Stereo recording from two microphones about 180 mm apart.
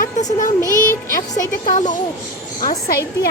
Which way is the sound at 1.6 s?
45° left (ahead or behind).